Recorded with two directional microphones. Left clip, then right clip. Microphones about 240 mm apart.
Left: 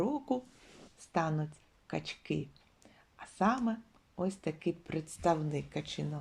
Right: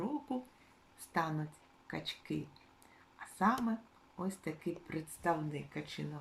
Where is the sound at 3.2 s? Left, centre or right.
Centre.